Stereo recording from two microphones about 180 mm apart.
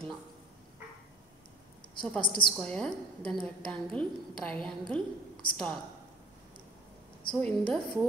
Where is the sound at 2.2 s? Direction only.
25° left (ahead or behind).